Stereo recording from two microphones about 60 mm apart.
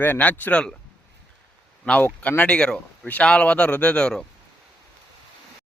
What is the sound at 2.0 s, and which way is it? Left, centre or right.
Speech, left.